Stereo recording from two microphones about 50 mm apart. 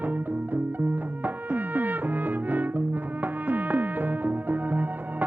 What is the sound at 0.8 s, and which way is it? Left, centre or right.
Music, right.